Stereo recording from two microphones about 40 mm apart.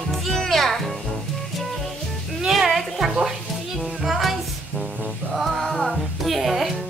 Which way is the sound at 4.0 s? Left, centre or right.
Centre.